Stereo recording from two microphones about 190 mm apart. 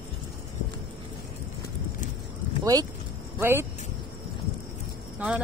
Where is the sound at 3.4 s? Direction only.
15° right (ahead or behind).